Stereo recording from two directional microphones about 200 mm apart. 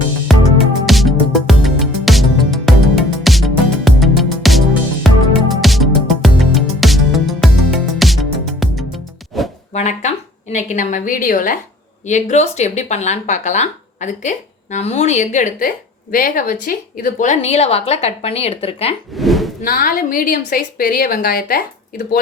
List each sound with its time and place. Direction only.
0.3 s music: centre (ahead or behind)
9.7 s a sound: 35° left (ahead or behind)
10.5 s speech: 40° left (ahead or behind)
19.1 s speech: centre (ahead or behind)
19.6 s a woman's voice: 45° left (ahead or behind)